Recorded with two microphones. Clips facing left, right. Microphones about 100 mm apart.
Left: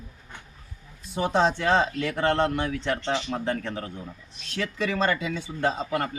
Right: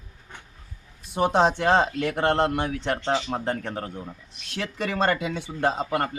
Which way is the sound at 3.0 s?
25° right (ahead or behind).